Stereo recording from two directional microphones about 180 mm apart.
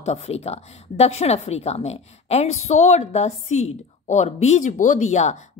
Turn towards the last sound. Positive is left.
turn(degrees=40)  # may be behind; listen again after turning